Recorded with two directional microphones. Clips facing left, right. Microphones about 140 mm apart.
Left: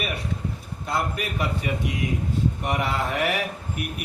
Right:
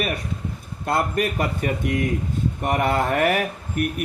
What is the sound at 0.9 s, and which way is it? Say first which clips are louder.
Speech: right 5 dB; 55° right (ahead or behind).